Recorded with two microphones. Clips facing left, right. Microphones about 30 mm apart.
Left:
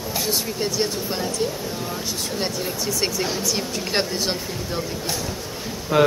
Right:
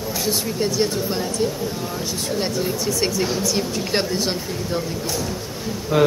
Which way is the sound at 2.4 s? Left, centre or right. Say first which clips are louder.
Right 3 dB; centre.